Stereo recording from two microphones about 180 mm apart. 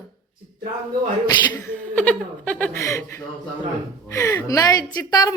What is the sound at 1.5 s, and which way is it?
A woman's voice, 5° left (ahead or behind).